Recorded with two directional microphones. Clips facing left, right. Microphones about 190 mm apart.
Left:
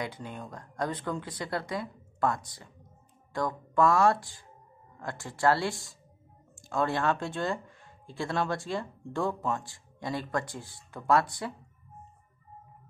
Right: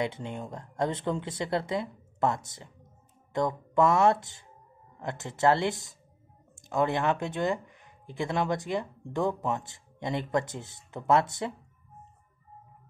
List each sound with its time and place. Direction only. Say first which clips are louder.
0.0 s speech: right 5 dB; 25° right (ahead or behind)